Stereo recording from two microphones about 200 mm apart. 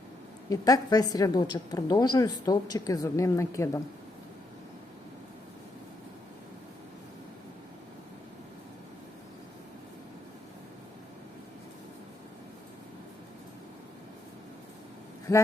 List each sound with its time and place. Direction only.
0.5 s a woman's voice: 20° left (ahead or behind)